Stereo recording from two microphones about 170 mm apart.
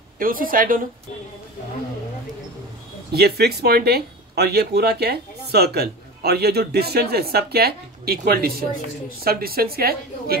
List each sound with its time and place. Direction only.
0.2 s a woman's voice: 55° right (ahead or behind)
3.1 s a woman's voice: 70° right (ahead or behind)